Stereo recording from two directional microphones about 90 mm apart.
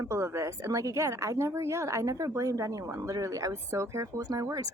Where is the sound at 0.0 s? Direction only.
30° right (ahead or behind).